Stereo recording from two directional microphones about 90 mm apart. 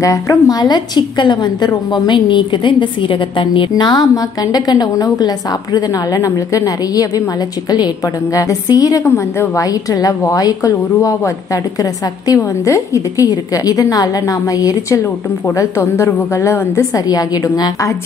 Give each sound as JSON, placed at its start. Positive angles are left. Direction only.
{"t": 0.0, "sound": "a woman's voice", "side_deg": 35}
{"t": 9.0, "sound": "a woman's voice", "side_deg": 30}
{"t": 9.6, "sound": "a woman's voice", "side_deg": 40}
{"t": 16.9, "sound": "a woman's voice", "side_deg": 45}